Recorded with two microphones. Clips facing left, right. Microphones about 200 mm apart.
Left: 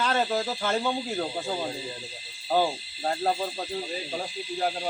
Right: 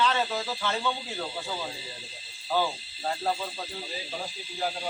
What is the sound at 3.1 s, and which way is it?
Speech, 40° left (ahead or behind).